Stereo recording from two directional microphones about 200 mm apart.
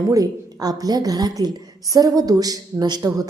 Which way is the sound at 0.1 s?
20° right (ahead or behind).